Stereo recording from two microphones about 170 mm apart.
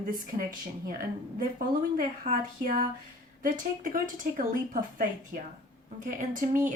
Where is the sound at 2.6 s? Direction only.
55° right (ahead or behind).